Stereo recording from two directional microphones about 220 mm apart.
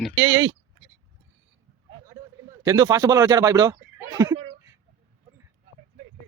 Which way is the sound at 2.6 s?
15° right (ahead or behind).